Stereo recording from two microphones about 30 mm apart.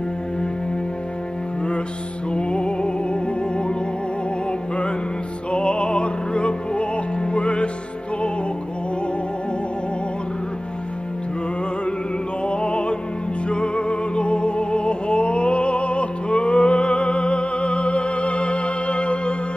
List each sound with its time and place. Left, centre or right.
2.3 s music: left
12.4 s music: left